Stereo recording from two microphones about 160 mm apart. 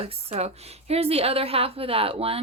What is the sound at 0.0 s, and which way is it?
Speech, 40° right (ahead or behind).